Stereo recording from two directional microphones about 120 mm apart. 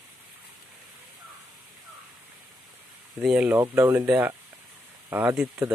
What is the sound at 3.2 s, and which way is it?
Speech, 5° right (ahead or behind).